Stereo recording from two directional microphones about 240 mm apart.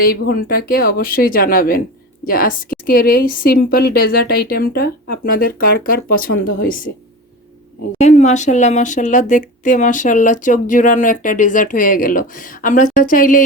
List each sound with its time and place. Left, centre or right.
0.0 s speech: left
7.9 s speech: left